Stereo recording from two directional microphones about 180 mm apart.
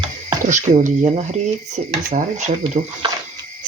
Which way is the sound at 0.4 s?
45° right (ahead or behind).